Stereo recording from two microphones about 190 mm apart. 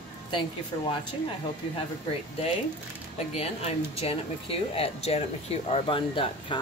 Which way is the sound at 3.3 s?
30° left (ahead or behind).